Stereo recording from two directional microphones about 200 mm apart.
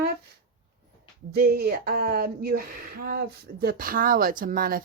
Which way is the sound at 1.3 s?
50° right (ahead or behind).